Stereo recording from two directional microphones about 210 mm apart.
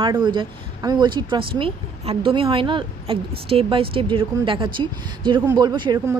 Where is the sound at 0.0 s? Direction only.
20° right (ahead or behind).